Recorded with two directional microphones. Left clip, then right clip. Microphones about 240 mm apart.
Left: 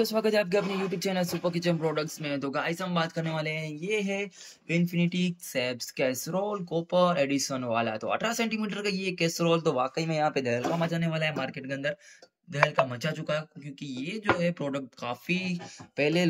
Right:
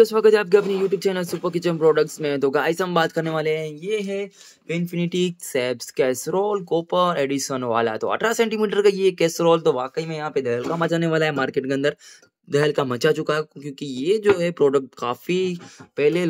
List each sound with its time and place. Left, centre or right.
0.0 s speech: centre
10.8 s speech: right